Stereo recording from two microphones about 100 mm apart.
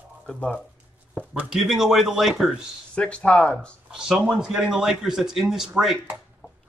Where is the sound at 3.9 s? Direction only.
10° right (ahead or behind).